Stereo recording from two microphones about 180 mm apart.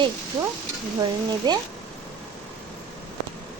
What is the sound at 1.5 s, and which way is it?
Speech, 25° right (ahead or behind).